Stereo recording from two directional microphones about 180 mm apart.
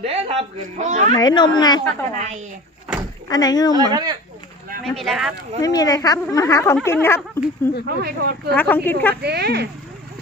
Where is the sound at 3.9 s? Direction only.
20° right (ahead or behind).